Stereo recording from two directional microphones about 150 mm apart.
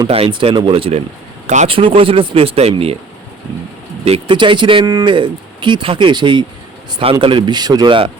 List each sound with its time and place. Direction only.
0.1 s speech: 35° right (ahead or behind)
1.5 s speech: 50° right (ahead or behind)
1.7 s speech: 35° right (ahead or behind)
4.0 s speech: 35° right (ahead or behind)